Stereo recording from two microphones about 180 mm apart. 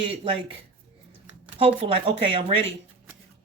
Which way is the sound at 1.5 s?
30° right (ahead or behind).